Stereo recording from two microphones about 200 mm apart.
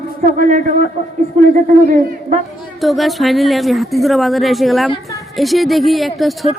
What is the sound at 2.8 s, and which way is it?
Speech, centre (ahead or behind).